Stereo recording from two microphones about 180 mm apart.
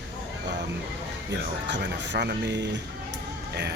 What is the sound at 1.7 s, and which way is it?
Speech, 75° right (ahead or behind).